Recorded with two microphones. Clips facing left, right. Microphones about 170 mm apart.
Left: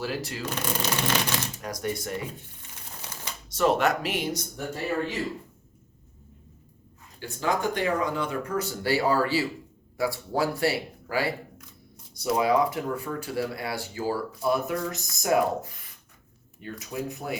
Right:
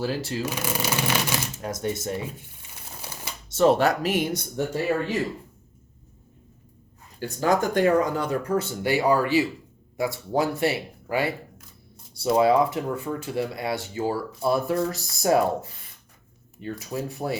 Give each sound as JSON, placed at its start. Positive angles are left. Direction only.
{"t": 0.0, "sound": "speech", "side_deg": -30}
{"t": 0.4, "sound": "speech", "side_deg": -10}
{"t": 1.6, "sound": "speech", "side_deg": -25}
{"t": 3.5, "sound": "speech", "side_deg": -30}
{"t": 7.2, "sound": "speech", "side_deg": -45}
{"t": 8.5, "sound": "speech", "side_deg": -20}